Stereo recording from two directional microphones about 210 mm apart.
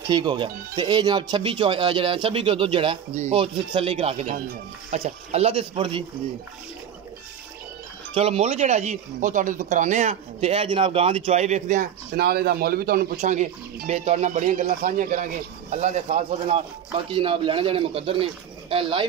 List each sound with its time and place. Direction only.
0.0 s speech: 20° right (ahead or behind)
8.1 s speech: 30° right (ahead or behind)